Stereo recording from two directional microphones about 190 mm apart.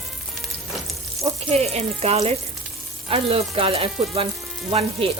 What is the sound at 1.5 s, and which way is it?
Speech, 35° right (ahead or behind).